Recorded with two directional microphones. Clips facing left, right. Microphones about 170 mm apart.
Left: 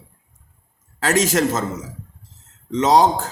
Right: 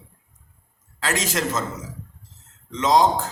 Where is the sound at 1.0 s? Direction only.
45° left (ahead or behind).